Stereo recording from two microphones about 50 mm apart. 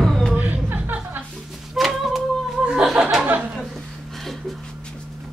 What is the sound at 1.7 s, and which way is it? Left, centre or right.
Child singing, centre.